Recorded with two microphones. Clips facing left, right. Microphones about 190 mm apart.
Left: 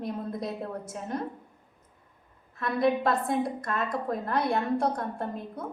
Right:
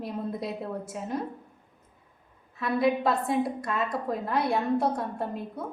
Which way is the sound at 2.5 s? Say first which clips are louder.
Even; 5° right (ahead or behind).